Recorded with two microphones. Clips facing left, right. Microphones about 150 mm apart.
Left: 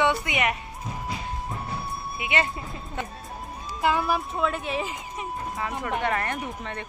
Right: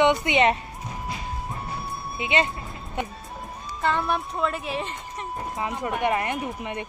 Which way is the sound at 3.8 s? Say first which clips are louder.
Left 1 dB; 5° left (ahead or behind).